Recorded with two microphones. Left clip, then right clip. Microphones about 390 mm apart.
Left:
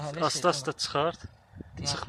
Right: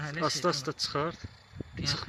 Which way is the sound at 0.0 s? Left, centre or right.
Centre.